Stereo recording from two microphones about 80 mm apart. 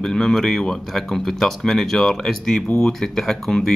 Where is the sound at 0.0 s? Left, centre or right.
Centre.